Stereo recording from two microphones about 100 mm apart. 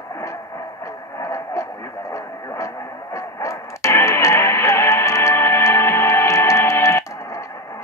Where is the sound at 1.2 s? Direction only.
30° left (ahead or behind).